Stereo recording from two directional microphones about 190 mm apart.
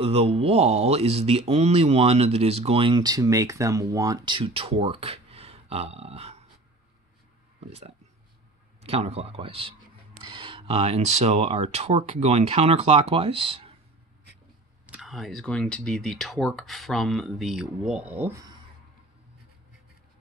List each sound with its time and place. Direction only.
0.0 s speech: 30° right (ahead or behind)
8.8 s speech: 30° right (ahead or behind)
14.9 s speech: centre (ahead or behind)